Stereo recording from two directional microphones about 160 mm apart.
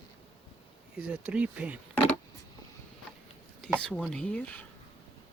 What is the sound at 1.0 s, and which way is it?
Speech, 10° right (ahead or behind).